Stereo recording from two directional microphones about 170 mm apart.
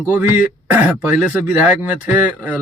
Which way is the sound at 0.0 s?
10° right (ahead or behind).